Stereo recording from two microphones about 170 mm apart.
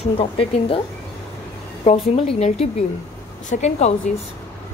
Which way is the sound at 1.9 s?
35° left (ahead or behind).